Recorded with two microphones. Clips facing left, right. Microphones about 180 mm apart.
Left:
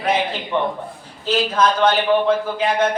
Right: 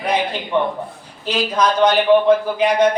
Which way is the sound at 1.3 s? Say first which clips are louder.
Even; 15° right (ahead or behind).